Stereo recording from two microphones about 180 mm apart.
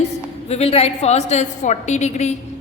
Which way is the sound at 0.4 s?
35° left (ahead or behind).